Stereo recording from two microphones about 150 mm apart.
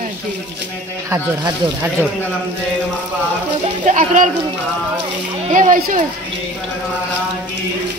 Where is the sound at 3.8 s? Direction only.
55° right (ahead or behind).